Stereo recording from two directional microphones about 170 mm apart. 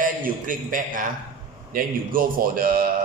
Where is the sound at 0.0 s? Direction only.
50° right (ahead or behind).